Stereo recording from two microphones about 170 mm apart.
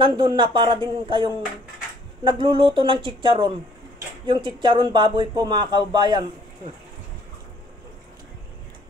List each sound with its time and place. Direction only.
0.0 s speech: 25° right (ahead or behind)